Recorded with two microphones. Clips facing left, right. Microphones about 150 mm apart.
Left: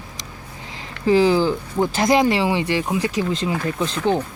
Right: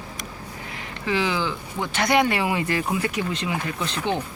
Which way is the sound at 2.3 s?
25° left (ahead or behind).